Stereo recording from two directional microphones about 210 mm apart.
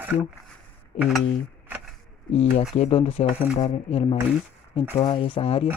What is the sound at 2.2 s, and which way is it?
Speech, 30° left (ahead or behind).